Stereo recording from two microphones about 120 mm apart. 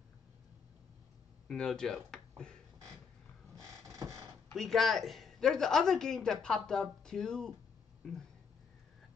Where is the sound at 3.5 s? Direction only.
25° right (ahead or behind).